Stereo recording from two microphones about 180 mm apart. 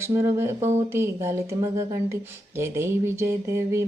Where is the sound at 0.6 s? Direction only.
40° right (ahead or behind).